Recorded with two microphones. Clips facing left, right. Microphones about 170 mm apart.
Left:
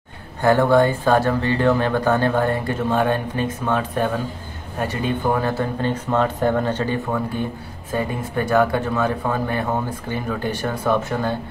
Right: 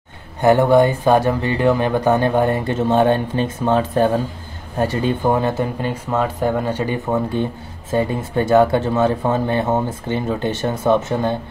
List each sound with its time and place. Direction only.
0.4 s speech: 20° right (ahead or behind)